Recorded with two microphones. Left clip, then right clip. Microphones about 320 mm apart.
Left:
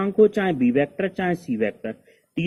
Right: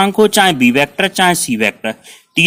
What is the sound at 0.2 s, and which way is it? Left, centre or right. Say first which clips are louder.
Speech: right 5 dB; right.